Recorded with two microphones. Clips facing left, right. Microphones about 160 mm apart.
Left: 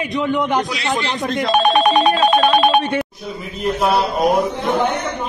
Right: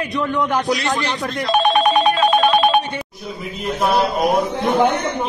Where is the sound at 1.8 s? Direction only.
75° left (ahead or behind).